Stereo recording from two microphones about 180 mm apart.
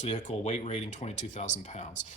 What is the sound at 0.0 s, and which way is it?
Speech, 40° left (ahead or behind).